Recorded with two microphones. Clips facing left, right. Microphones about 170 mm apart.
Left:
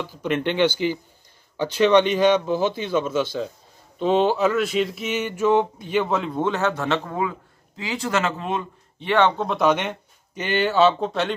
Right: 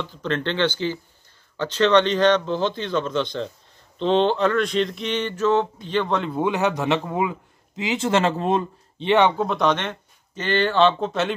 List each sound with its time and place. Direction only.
0.0 s speech: 10° left (ahead or behind)
6.4 s a man's voice: 15° right (ahead or behind); by 8.6 s 35° right (ahead or behind)
9.0 s a man's voice: 20° right (ahead or behind)
9.4 s speech: centre (ahead or behind)